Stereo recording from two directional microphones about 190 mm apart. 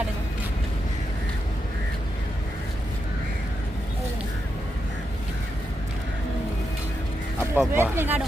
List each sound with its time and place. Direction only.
7.5 s speech: 10° right (ahead or behind)